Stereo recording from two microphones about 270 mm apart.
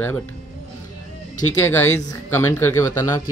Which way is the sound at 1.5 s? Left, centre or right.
Centre.